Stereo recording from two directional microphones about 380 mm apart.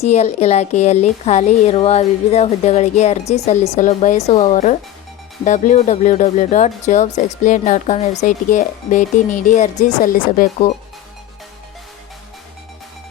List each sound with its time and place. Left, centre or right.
0.0 s a woman's voice: centre